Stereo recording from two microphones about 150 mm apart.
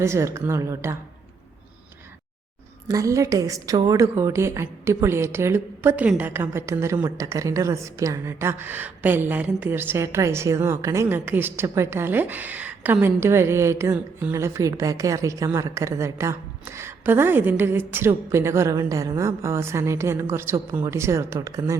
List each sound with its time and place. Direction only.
0.0 s a woman's voice: 20° right (ahead or behind)
2.8 s a woman's voice: 25° right (ahead or behind)